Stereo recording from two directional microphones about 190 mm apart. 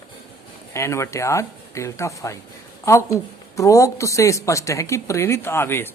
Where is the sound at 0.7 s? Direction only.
15° left (ahead or behind).